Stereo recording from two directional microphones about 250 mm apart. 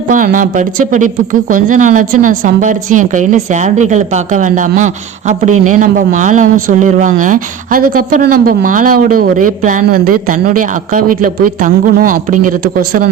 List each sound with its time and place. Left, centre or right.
0.1 s a man's voice: right